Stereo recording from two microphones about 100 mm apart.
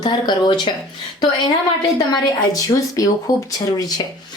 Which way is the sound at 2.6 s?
35° left (ahead or behind).